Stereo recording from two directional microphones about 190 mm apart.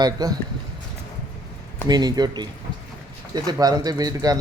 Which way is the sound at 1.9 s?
20° right (ahead or behind).